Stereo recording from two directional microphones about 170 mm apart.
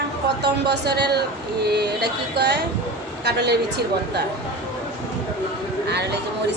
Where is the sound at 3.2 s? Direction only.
75° right (ahead or behind).